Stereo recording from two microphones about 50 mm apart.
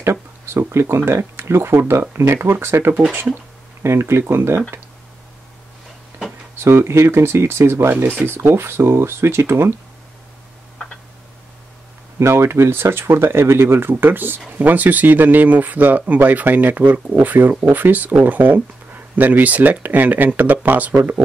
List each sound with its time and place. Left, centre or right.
0.0 s speech: right
2.3 s speech: right
4.2 s speech: right
6.5 s speech: right
12.2 s speech: right